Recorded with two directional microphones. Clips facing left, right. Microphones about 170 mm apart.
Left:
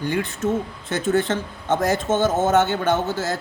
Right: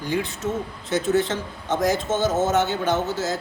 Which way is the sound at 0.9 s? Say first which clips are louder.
Even; 55° left (ahead or behind).